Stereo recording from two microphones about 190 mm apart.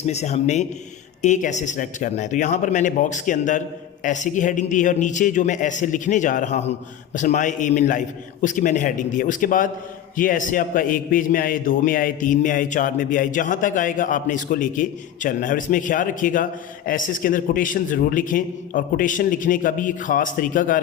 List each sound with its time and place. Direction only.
0.0 s a man's voice: 35° left (ahead or behind)